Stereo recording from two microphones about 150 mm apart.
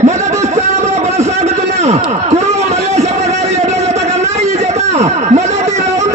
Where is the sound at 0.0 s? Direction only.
50° right (ahead or behind).